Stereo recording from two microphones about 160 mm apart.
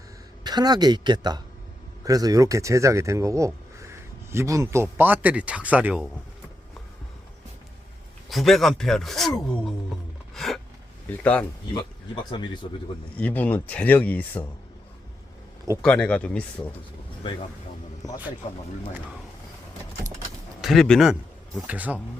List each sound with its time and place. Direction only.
0.4 s speech: 25° right (ahead or behind); by 6.1 s 10° right (ahead or behind)
8.3 s speech: centre (ahead or behind)
10.3 s a sound: centre (ahead or behind)
11.2 s speech: 10° left (ahead or behind)
13.1 s speech: 10° left (ahead or behind)
15.8 s speech: 5° left (ahead or behind)
16.6 s speech: 20° left (ahead or behind)
20.6 s speech: centre (ahead or behind)
21.7 s speech: 10° right (ahead or behind)